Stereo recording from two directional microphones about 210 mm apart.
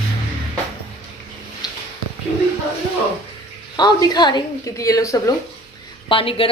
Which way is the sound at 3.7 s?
20° left (ahead or behind).